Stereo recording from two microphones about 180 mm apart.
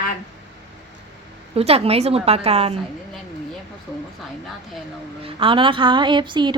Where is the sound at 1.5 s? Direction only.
35° right (ahead or behind).